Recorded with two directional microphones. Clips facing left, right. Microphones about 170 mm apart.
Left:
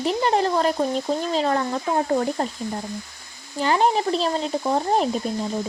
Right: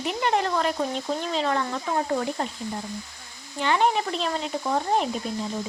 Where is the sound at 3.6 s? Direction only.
35° left (ahead or behind).